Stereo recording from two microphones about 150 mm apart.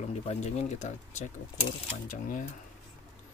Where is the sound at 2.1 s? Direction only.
60° left (ahead or behind).